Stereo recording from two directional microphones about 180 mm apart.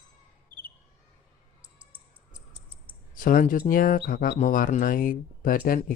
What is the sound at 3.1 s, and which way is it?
Speech, 50° left (ahead or behind).